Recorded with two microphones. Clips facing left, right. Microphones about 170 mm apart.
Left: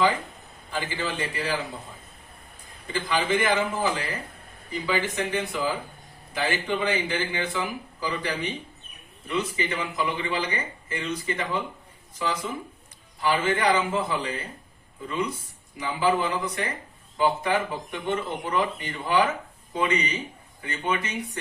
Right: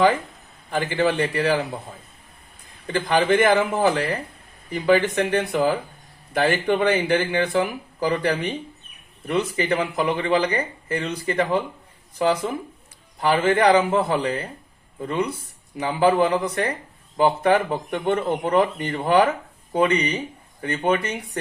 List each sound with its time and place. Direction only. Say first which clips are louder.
0.7 s speech: right 9 dB; 55° right (ahead or behind)
2.8 s speech: right 6 dB; 55° right (ahead or behind)
13.1 s speech: right 6 dB; 55° right (ahead or behind)